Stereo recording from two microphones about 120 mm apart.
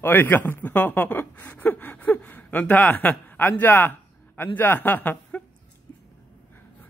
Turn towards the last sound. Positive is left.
turn(degrees=15)  # may be behind; listen again after turning